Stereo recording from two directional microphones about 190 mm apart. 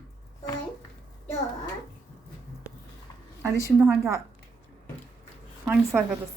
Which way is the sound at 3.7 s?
15° right (ahead or behind).